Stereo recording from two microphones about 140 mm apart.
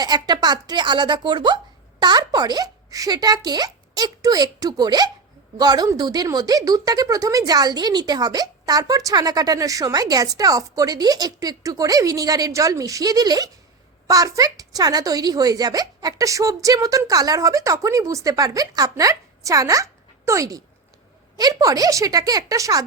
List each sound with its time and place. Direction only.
0.0 s a woman's voice: 30° right (ahead or behind)